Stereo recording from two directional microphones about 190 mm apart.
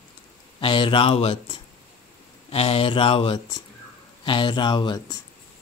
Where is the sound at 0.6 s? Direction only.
25° left (ahead or behind).